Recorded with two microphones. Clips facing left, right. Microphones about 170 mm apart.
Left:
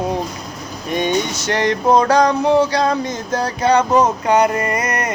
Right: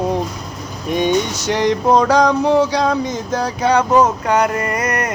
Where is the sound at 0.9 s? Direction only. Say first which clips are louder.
Right 2 dB; 10° right (ahead or behind).